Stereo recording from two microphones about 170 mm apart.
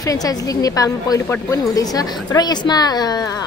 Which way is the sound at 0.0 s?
20° left (ahead or behind).